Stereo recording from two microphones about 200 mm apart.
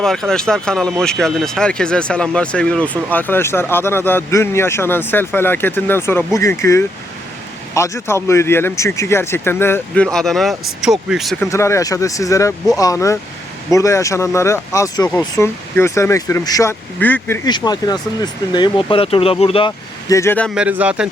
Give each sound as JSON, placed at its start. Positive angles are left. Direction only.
{"t": 0.0, "sound": "speech", "side_deg": 0}
{"t": 11.4, "sound": "speech", "side_deg": 15}
{"t": 20.6, "sound": "speech", "side_deg": -5}